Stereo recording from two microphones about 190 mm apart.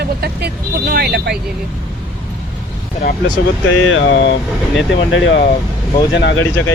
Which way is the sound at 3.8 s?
90° left.